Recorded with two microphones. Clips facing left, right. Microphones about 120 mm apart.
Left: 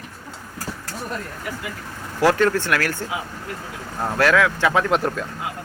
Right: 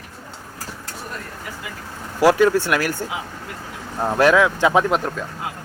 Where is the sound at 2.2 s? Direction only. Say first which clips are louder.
Right 3 dB; 10° right (ahead or behind).